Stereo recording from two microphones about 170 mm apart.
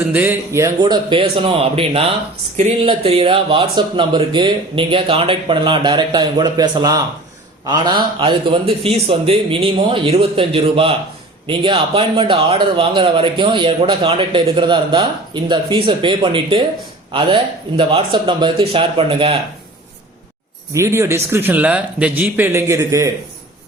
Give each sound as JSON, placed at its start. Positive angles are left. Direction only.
{"t": 0.1, "sound": "speech", "side_deg": -10}
{"t": 0.8, "sound": "a man's voice", "side_deg": -25}
{"t": 20.7, "sound": "speech", "side_deg": -15}